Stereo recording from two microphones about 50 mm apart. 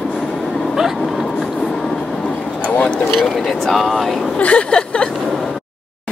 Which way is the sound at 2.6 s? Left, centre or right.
Left.